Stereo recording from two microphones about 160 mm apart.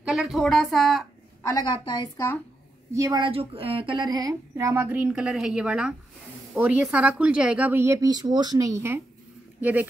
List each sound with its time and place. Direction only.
0.1 s a woman's voice: centre (ahead or behind)
1.4 s a woman's voice: 25° left (ahead or behind)
2.9 s a woman's voice: 20° right (ahead or behind)
3.3 s speech: 35° right (ahead or behind); by 9.8 s 10° right (ahead or behind)